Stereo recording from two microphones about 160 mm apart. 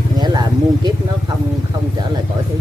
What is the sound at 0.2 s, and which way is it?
Vehicle, 25° right (ahead or behind).